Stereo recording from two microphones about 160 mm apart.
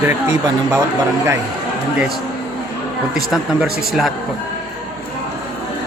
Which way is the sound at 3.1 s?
5° right (ahead or behind).